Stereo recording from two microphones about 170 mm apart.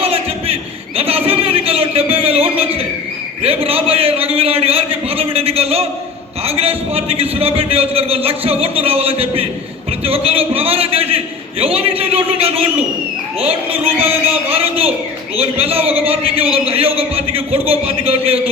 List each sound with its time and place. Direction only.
0.0 s a sound: 35° right (ahead or behind)
3.4 s a man's voice: 35° right (ahead or behind)
14.5 s a man's voice: 35° right (ahead or behind)